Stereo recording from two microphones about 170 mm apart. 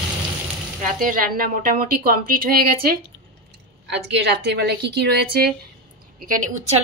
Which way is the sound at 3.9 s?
85° right.